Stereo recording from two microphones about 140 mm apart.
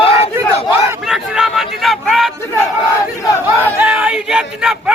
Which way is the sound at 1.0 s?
5° right (ahead or behind).